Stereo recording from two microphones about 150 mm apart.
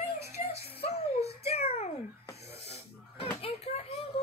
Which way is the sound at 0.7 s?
45° left (ahead or behind).